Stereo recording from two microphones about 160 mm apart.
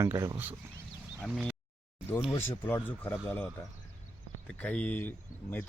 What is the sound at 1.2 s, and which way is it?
Speech, 5° left (ahead or behind).